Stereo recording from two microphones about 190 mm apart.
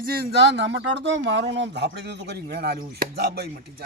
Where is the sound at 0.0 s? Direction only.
50° right (ahead or behind).